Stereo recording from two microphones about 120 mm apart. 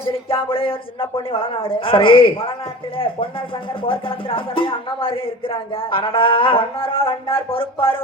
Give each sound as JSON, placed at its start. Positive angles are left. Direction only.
{"t": 0.1, "sound": "speech", "side_deg": 45}
{"t": 3.8, "sound": "speech", "side_deg": 45}